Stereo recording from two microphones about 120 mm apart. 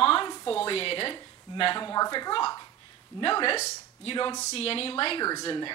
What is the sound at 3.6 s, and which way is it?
Speech, 60° left (ahead or behind).